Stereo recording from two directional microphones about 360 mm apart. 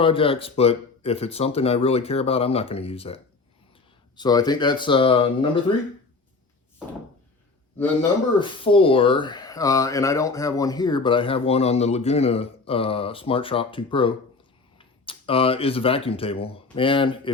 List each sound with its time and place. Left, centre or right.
0.0 s speech: centre
4.2 s speech: centre
8.4 s speech: centre